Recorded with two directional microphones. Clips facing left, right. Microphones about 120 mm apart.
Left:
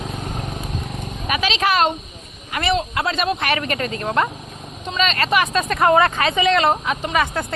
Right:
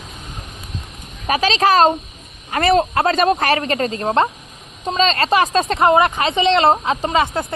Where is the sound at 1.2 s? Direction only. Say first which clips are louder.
Right 5 dB; 35° right (ahead or behind).